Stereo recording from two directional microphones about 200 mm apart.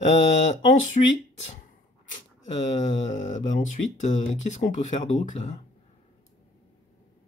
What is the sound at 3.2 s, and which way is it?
Speech, 35° left (ahead or behind).